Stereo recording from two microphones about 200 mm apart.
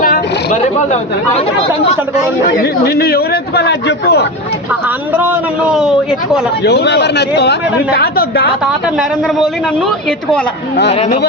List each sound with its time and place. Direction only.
0.0 s a sound: 45° left (ahead or behind)
2.6 s speech: 55° left (ahead or behind)
4.7 s a man's voice: 10° right (ahead or behind)
6.6 s speech: 60° left (ahead or behind)
8.6 s a man's voice: centre (ahead or behind)